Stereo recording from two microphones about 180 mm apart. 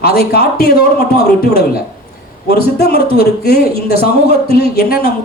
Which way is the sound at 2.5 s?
60° left (ahead or behind).